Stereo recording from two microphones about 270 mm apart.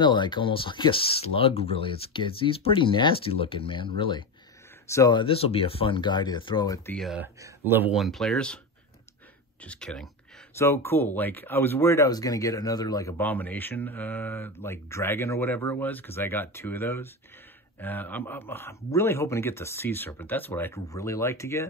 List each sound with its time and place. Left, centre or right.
0.0 s speech: centre
7.0 s speech: centre
9.6 s speech: centre